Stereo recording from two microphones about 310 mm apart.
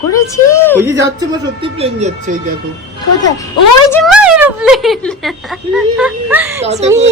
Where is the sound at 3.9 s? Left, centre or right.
Centre.